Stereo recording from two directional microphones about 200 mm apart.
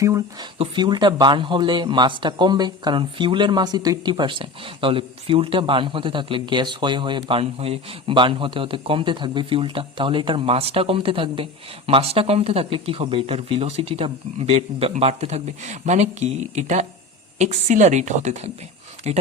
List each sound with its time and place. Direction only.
0.0 s speech: 15° right (ahead or behind); by 19.2 s 35° right (ahead or behind)